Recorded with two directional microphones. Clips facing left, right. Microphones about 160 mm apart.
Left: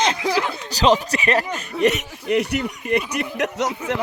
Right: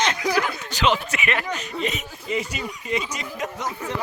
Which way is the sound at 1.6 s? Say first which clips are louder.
Left 8 dB; 70° left (ahead or behind).